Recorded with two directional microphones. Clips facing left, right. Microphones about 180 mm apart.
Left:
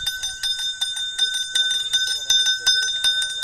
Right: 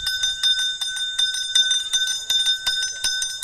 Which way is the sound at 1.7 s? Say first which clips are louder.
Left 1 dB; 40° left (ahead or behind).